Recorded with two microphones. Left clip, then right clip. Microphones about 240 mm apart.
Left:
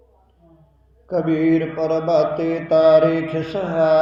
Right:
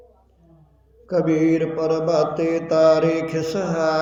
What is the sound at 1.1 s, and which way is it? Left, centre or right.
Mantra, centre.